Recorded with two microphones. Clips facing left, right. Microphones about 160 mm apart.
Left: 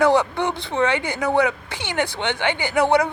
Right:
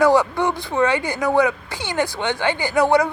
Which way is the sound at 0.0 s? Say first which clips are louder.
Right 2 dB; 20° left (ahead or behind).